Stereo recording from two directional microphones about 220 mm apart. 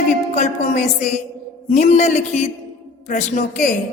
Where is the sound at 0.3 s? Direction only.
30° left (ahead or behind).